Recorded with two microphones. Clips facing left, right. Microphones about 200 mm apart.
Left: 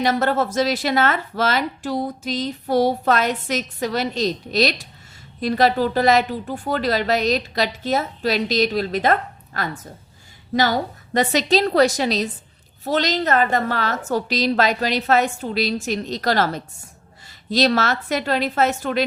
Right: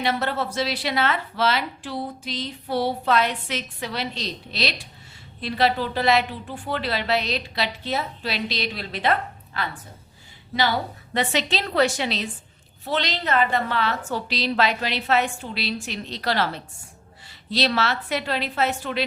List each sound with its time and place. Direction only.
0.0 s a woman's voice: 45° left (ahead or behind)